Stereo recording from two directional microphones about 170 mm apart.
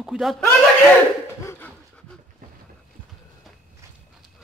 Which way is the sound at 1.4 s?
15° left (ahead or behind).